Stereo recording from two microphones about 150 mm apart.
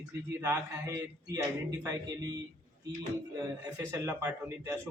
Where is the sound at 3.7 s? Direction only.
15° right (ahead or behind).